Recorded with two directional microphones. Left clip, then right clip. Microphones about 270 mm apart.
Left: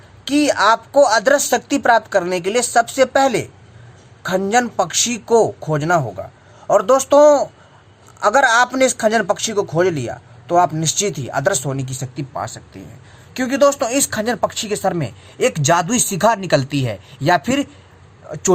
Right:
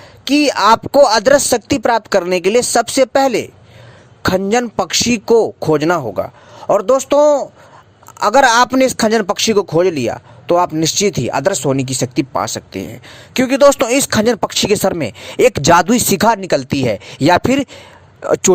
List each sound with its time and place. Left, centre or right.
0.3 s a man's voice: right